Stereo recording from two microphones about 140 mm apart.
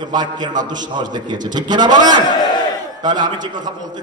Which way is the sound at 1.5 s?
30° right (ahead or behind).